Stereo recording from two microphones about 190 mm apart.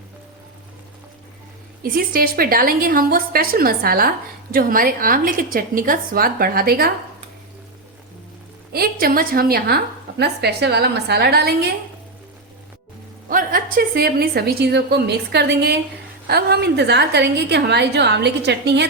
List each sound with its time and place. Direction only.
1.8 s a woman's voice: 50° right (ahead or behind)
8.7 s a woman's voice: 50° right (ahead or behind)
13.3 s a woman's voice: 50° right (ahead or behind); by 18.9 s 65° right (ahead or behind)